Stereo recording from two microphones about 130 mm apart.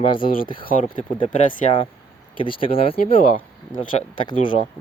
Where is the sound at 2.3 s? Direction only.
40° left (ahead or behind).